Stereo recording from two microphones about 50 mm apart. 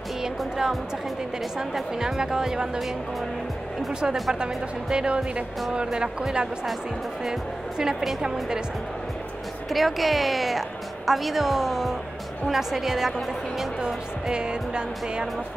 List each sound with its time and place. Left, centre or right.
0.2 s music: centre
1.6 s speech: centre
4.0 s speech: centre
7.2 s speech: centre
9.7 s a woman's voice: centre